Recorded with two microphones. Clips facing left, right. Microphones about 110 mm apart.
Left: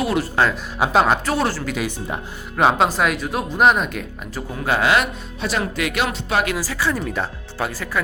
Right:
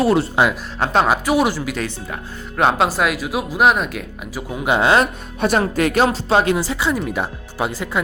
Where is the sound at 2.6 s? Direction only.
Centre (ahead or behind); by 5.0 s 25° right (ahead or behind).